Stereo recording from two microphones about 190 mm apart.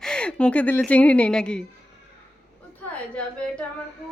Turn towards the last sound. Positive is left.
turn(degrees=5)  # may be behind; listen again after turning